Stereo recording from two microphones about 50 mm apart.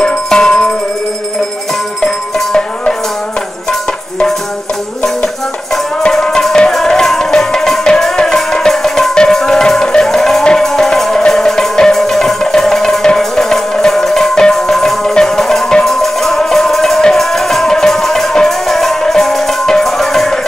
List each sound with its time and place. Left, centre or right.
0.0 s music: centre
2.0 s music: centre
6.0 s music: centre